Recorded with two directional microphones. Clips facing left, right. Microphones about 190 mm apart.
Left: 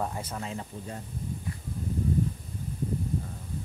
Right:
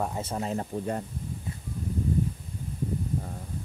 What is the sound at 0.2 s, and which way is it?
Speech, 30° right (ahead or behind).